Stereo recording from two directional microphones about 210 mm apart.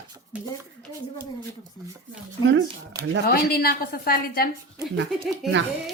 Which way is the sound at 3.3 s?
45° left (ahead or behind).